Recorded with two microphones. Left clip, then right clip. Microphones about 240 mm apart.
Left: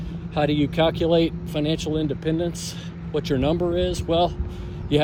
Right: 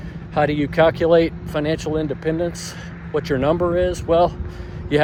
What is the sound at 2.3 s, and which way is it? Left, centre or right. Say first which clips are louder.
Speech: right 4 dB; right.